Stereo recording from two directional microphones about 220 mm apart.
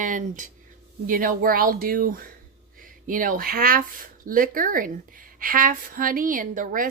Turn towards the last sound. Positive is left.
turn(degrees=-40)  # may be behind; listen again after turning